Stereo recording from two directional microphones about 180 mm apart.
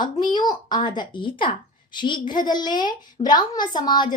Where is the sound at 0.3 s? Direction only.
25° left (ahead or behind).